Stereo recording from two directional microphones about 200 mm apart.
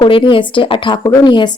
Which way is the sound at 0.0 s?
25° left (ahead or behind).